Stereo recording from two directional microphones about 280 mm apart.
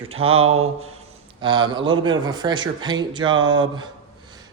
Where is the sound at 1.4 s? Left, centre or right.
Centre.